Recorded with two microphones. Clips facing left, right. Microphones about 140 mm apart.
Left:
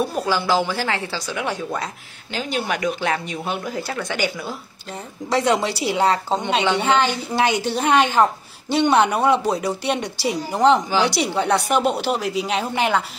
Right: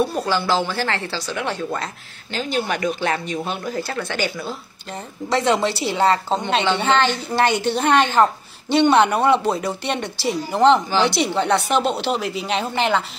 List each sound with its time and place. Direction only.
0.1 s a woman's voice: 10° left (ahead or behind)